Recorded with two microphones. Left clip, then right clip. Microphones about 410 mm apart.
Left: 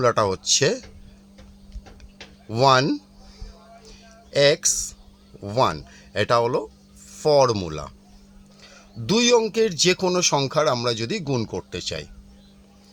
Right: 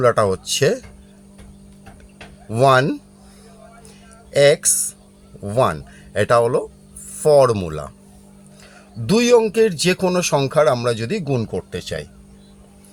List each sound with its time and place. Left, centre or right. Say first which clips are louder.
0.0 s speech: right 4 dB; left
2.5 s speech: right 3 dB; left
4.3 s speech: right 4 dB; left
9.0 s speech: right 4 dB; left